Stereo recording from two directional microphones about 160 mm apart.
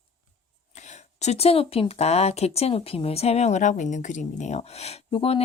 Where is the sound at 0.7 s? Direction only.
45° left (ahead or behind).